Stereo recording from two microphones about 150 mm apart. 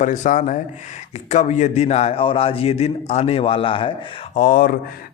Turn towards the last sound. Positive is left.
turn(degrees=70)  # may be behind; listen again after turning